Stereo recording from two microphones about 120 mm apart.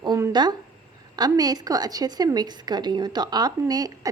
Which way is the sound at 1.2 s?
35° right (ahead or behind).